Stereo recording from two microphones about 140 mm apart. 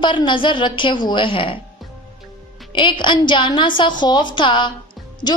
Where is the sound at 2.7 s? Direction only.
35° left (ahead or behind).